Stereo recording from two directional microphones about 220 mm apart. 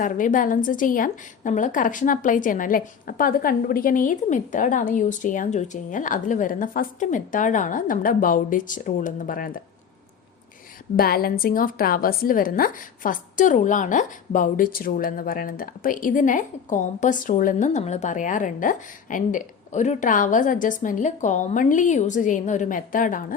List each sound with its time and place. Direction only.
0.0 s a woman's voice: 35° left (ahead or behind)
10.9 s a woman's voice: 45° left (ahead or behind)